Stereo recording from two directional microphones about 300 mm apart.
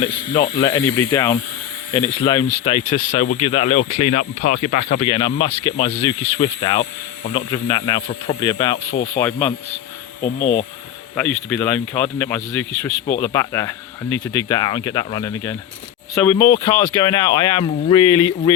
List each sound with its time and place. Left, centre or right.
0.0 s speech: centre
10.2 s speech: left
11.4 s speech: centre